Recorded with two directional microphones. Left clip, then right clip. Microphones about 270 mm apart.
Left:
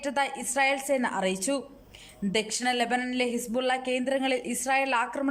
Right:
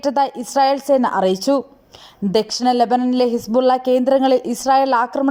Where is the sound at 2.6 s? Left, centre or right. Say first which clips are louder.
Right 12 dB; centre.